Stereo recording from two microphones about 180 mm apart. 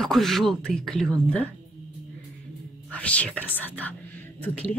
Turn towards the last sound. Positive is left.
turn(degrees=10)  # may be behind; listen again after turning